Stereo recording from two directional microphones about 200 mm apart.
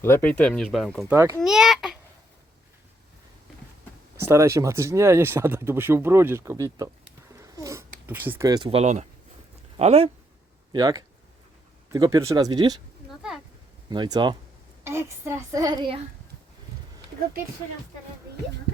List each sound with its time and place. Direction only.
0.0 s speech: 10° left (ahead or behind)
1.1 s speech: 15° right (ahead or behind)
1.4 s a sound: centre (ahead or behind)
4.2 s speech: 15° right (ahead or behind)
7.4 s a sound: 15° right (ahead or behind); by 9.0 s 35° right (ahead or behind)
9.7 s speech: 30° right (ahead or behind)
10.7 s speech: 20° right (ahead or behind)
13.2 s speech: 5° right (ahead or behind)
13.9 s speech: 25° right (ahead or behind)
14.8 s speech: 10° right (ahead or behind)